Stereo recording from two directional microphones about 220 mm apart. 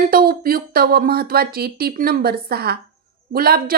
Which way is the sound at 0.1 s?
40° right (ahead or behind).